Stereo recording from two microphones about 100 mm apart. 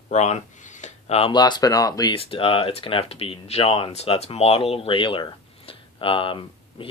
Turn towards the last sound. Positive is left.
turn(degrees=60)  # may be behind; listen again after turning